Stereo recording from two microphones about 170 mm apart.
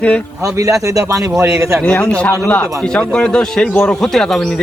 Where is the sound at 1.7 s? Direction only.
10° left (ahead or behind).